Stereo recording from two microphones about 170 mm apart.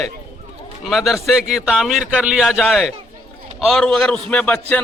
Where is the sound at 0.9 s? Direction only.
Centre (ahead or behind).